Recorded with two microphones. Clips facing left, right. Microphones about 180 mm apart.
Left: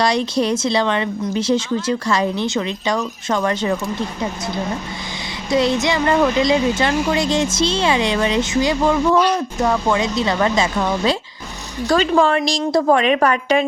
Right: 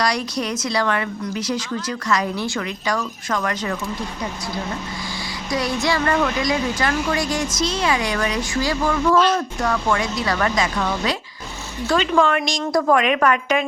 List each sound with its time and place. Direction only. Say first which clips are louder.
0.0 s speech: left 5 dB; 25° left (ahead or behind)
5.5 s a woman's voice: left 5 dB; 25° left (ahead or behind)